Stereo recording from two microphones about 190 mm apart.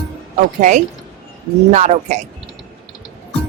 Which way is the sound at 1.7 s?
35° right (ahead or behind).